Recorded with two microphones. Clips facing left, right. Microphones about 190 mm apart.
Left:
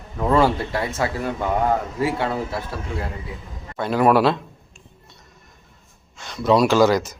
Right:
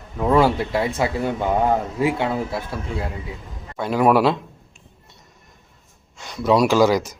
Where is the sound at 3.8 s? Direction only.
10° right (ahead or behind).